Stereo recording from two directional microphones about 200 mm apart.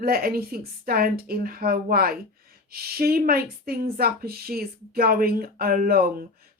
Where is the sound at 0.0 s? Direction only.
50° right (ahead or behind).